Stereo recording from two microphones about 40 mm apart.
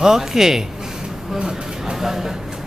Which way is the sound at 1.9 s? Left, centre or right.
Centre.